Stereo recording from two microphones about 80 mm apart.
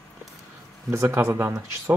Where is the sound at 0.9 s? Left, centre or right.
Right.